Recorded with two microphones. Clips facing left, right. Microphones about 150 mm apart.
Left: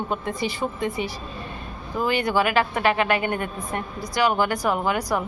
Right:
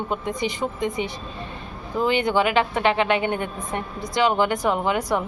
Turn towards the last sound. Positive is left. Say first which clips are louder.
# right 1 dB
turn(degrees=-20)  # may be behind; listen again after turning